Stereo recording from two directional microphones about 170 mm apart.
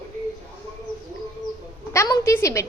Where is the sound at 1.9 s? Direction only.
20° left (ahead or behind).